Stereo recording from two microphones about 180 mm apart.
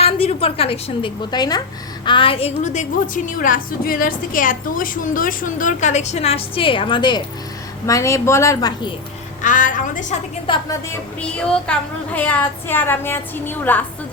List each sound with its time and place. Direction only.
0.0 s a woman's voice: 35° left (ahead or behind)
3.2 s a woman's voice: 50° left (ahead or behind); by 8.9 s 20° left (ahead or behind)
9.4 s a woman's voice: 45° left (ahead or behind)
10.4 s a woman's voice: 25° left (ahead or behind)
11.2 s a woman's voice: 5° left (ahead or behind)